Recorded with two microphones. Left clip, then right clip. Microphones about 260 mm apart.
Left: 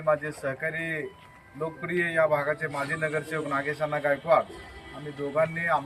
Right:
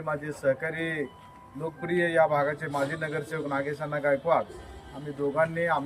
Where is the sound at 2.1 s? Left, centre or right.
Centre.